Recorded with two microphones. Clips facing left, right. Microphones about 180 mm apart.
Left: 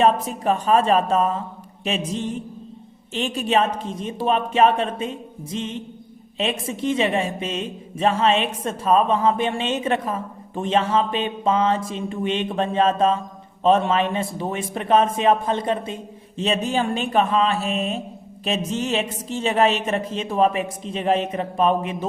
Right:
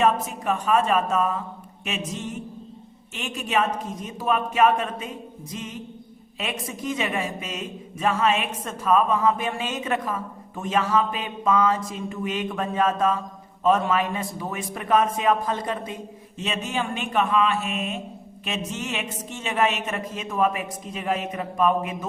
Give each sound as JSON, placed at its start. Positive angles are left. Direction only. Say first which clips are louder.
{"t": 0.0, "sound": "a man's voice", "louder": "left 3 dB", "side_deg": 30}